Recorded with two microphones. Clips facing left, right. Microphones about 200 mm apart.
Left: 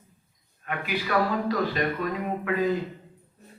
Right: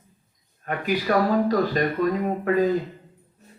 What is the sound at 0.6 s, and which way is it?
Speech, 40° right (ahead or behind).